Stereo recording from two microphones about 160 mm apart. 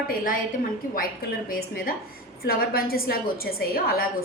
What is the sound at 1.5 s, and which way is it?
A woman's voice, 65° left (ahead or behind).